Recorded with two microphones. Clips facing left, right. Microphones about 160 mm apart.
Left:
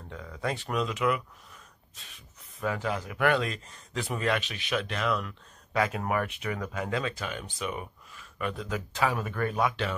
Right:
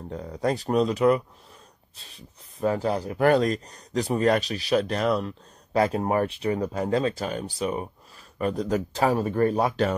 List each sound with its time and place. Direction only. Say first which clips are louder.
0.1 s speech: right 7 dB; 35° right (ahead or behind)